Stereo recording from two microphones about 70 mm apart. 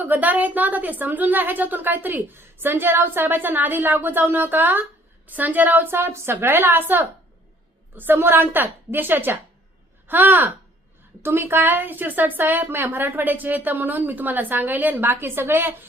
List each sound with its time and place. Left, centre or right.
0.0 s a woman's voice: right